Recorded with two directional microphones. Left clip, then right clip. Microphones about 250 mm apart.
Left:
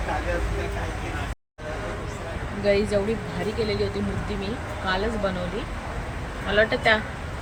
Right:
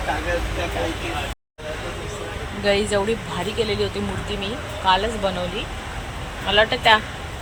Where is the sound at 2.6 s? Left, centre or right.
Centre.